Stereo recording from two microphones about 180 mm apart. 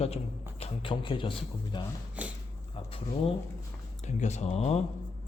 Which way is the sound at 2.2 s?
10° right (ahead or behind).